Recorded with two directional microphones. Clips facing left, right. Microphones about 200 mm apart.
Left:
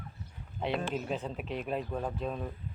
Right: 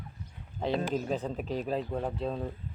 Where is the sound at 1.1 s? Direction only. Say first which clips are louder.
Right 3 dB; 35° right (ahead or behind).